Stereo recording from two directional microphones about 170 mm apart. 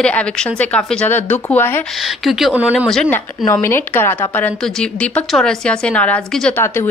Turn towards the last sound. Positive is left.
turn(degrees=5)  # may be behind; listen again after turning